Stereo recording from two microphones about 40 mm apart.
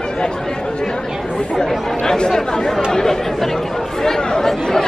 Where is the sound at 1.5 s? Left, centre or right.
Centre.